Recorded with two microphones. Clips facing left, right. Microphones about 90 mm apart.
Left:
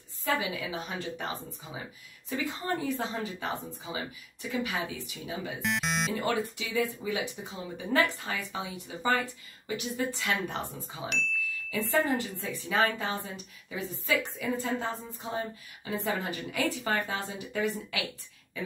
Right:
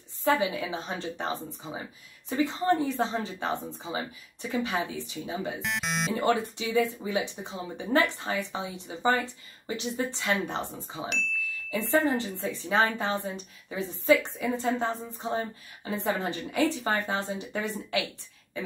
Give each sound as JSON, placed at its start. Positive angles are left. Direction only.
{"t": 0.2, "sound": "a woman's voice", "side_deg": -30}
{"t": 5.6, "sound": "music", "side_deg": 0}
{"t": 6.8, "sound": "a woman's voice", "side_deg": -30}
{"t": 11.1, "sound": "speech", "side_deg": 0}
{"t": 11.7, "sound": "a woman's voice", "side_deg": -25}